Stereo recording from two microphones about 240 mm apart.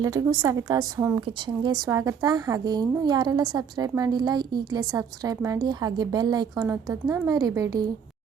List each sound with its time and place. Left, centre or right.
0.0 s a woman's voice: centre